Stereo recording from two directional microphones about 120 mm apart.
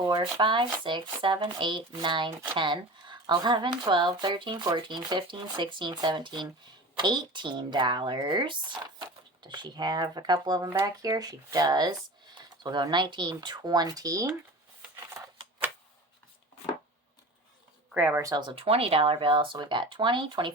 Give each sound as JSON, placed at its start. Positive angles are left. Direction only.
{"t": 0.0, "sound": "speech", "side_deg": -40}
{"t": 17.9, "sound": "speech", "side_deg": -10}
{"t": 18.2, "sound": "speech", "side_deg": -25}
{"t": 18.4, "sound": "speech", "side_deg": -50}